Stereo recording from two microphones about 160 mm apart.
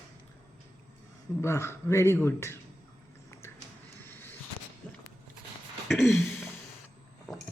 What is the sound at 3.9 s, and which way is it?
Vehicle, 10° left (ahead or behind).